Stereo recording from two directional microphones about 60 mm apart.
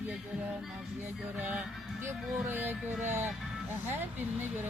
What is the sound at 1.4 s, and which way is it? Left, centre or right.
Speech, right.